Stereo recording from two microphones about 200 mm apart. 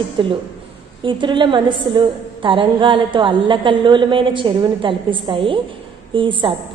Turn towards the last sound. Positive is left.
turn(degrees=-25)  # may be behind; listen again after turning